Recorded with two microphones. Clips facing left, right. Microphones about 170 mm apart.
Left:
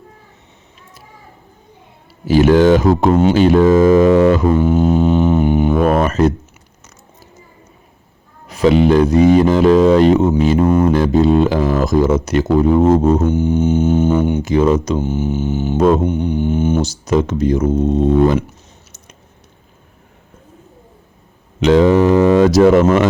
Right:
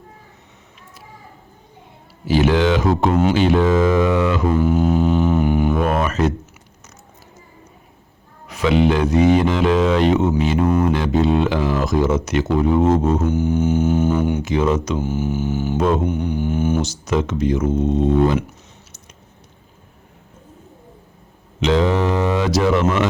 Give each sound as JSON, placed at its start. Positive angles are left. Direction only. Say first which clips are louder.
{"t": 2.2, "sound": "speech", "louder": "left 6 dB", "side_deg": 45}
{"t": 4.5, "sound": "didgeridoo", "louder": "left 3 dB", "side_deg": 20}
{"t": 5.8, "sound": "speech", "louder": "left 5 dB", "side_deg": 40}
{"t": 8.4, "sound": "speech", "louder": "left 5 dB", "side_deg": 35}
{"t": 13.2, "sound": "didgeridoo", "louder": "left 3 dB", "side_deg": 20}
{"t": 14.4, "sound": "speech", "louder": "left 5 dB", "side_deg": 35}
{"t": 14.9, "sound": "didgeridoo", "louder": "left 3 dB", "side_deg": 20}
{"t": 16.8, "sound": "speech", "louder": "left 5 dB", "side_deg": 35}
{"t": 21.6, "sound": "speech", "louder": "left 7 dB", "side_deg": 50}